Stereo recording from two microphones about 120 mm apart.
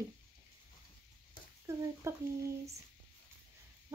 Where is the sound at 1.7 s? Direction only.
25° right (ahead or behind).